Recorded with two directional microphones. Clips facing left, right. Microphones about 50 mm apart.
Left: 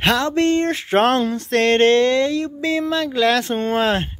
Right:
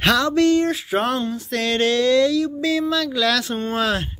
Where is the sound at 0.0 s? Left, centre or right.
Left.